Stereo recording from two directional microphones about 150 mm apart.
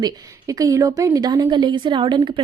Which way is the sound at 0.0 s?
25° right (ahead or behind).